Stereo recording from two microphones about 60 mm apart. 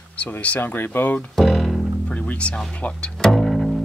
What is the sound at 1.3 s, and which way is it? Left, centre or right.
Music, centre.